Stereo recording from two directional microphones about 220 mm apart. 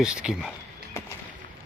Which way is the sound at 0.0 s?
5° right (ahead or behind).